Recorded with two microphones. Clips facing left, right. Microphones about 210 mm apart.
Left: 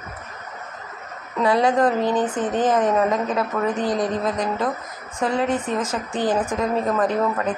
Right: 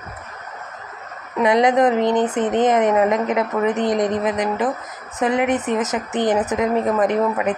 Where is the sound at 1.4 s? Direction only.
20° right (ahead or behind).